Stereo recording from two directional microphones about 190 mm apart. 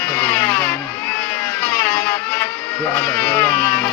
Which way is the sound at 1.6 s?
10° left (ahead or behind).